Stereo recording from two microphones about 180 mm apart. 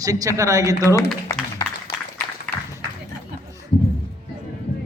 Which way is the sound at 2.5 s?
5° left (ahead or behind).